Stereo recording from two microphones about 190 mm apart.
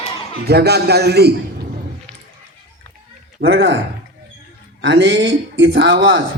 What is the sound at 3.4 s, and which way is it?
Speech, 70° right (ahead or behind).